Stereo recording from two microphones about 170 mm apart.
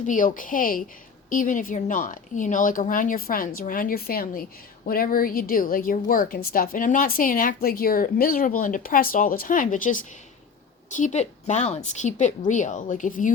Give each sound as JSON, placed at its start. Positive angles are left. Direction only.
{"t": 0.0, "sound": "a woman's voice", "side_deg": 50}